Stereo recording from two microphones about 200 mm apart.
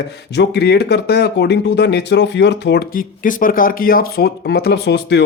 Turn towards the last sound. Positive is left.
turn(degrees=55)  # may be behind; listen again after turning